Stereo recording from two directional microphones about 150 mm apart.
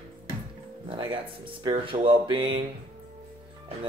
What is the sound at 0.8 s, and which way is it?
Speech, 30° right (ahead or behind).